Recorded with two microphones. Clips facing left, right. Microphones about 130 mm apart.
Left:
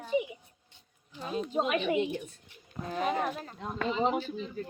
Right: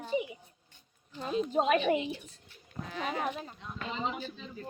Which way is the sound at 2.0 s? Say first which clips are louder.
Left 6 dB; 55° left (ahead or behind).